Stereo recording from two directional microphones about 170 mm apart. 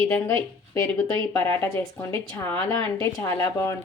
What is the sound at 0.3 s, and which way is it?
A woman's voice, 20° left (ahead or behind).